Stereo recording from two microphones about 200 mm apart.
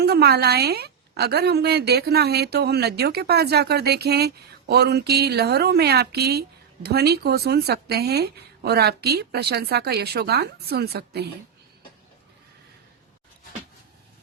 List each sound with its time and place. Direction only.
0.0 s a woman's voice: 55° right (ahead or behind)